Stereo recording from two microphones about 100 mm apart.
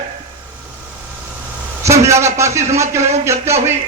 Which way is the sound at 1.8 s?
30° right (ahead or behind).